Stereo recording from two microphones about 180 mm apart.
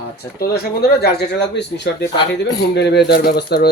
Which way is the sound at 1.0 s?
65° left (ahead or behind).